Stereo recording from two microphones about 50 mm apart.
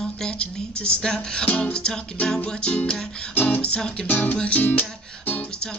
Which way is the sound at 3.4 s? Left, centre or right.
Left.